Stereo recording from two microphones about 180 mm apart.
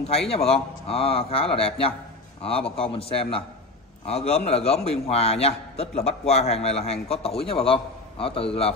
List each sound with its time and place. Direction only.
0.3 s a man's voice: 35° left (ahead or behind)